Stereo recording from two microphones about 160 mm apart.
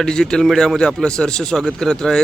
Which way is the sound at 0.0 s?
5° left (ahead or behind).